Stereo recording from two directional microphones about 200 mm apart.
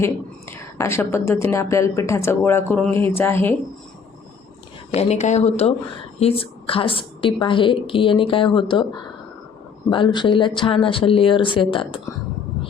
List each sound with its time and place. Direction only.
0.0 s speech: 15° left (ahead or behind)
4.9 s a woman's voice: 35° left (ahead or behind)
9.9 s a woman's voice: 25° left (ahead or behind)